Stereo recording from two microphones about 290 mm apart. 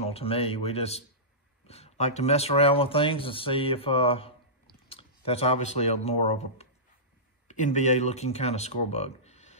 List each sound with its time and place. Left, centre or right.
0.0 s speech: centre